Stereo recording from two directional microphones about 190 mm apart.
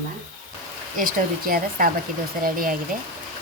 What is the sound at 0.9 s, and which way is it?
A woman's voice, 45° right (ahead or behind).